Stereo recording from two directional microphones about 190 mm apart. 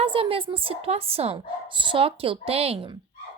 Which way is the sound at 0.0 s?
30° right (ahead or behind).